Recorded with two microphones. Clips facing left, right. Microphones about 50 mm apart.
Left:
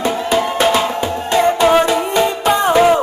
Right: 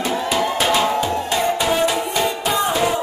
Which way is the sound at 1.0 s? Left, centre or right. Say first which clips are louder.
Left 5 dB; left.